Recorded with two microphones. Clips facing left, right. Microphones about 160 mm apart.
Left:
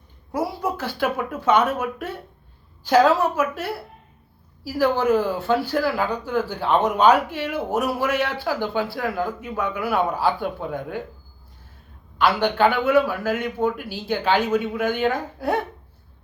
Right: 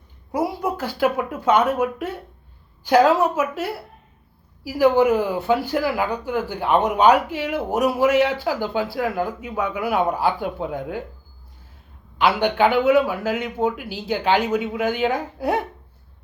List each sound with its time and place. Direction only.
0.3 s speech: 15° right (ahead or behind)
4.6 s speech: 15° right (ahead or behind)
12.1 s speech: 15° right (ahead or behind)